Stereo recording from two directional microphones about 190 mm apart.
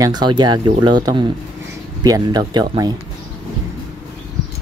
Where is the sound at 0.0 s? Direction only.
20° right (ahead or behind).